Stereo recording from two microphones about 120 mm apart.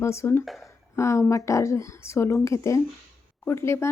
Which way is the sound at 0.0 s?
25° left (ahead or behind).